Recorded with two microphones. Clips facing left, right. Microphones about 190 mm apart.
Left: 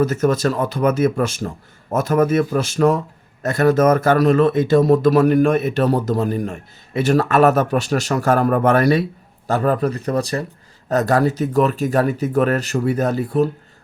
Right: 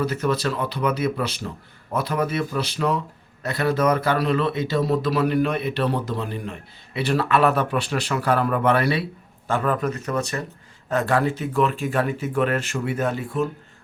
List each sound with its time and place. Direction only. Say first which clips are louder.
0.0 s speech: left 6 dB; 45° left (ahead or behind)